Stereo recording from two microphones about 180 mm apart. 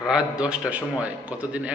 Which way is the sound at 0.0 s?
5° right (ahead or behind).